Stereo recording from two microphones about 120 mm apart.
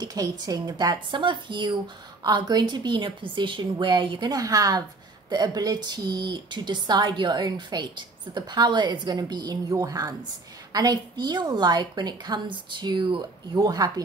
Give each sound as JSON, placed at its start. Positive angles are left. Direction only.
{"t": 0.0, "sound": "a woman's voice", "side_deg": -35}